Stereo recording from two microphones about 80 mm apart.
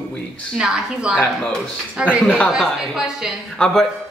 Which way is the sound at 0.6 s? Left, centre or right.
Centre.